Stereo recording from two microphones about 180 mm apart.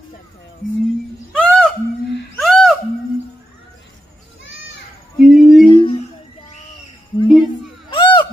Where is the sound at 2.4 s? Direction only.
Centre (ahead or behind).